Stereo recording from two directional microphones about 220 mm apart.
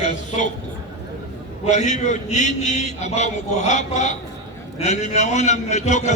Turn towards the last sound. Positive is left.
turn(degrees=30)  # may be behind; listen again after turning